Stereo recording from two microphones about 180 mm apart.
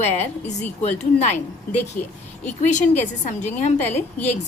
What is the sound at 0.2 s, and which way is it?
A woman's voice, 40° left (ahead or behind).